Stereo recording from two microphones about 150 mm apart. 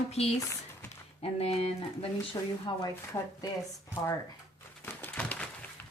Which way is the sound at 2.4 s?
25° left (ahead or behind).